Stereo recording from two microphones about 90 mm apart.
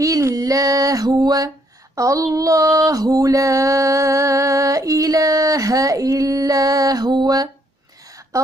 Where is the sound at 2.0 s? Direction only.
40° right (ahead or behind).